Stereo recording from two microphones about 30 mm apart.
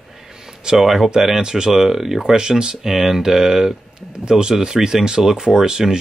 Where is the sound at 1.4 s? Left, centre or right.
Right.